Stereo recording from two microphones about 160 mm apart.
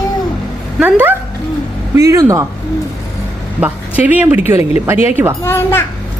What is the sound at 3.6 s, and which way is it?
Speech, 10° right (ahead or behind).